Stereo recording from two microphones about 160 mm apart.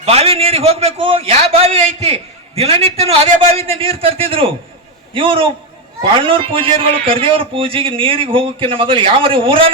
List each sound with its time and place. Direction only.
0.0 s a man's voice: 40° right (ahead or behind)